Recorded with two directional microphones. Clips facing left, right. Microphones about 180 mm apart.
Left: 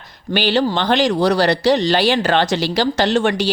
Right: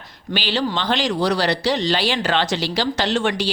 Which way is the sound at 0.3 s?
50° left (ahead or behind).